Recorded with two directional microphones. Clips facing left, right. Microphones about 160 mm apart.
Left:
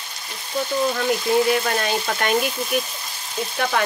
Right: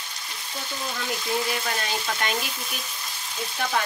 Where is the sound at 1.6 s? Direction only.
55° left (ahead or behind).